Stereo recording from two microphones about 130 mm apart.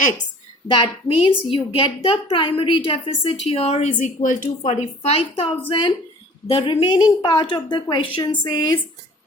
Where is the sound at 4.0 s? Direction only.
85° left.